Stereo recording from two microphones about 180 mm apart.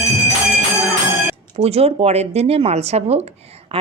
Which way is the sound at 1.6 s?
35° right (ahead or behind).